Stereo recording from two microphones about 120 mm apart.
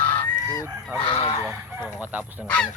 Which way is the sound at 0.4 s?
30° left (ahead or behind).